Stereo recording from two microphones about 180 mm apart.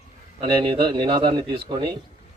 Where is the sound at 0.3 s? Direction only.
30° right (ahead or behind).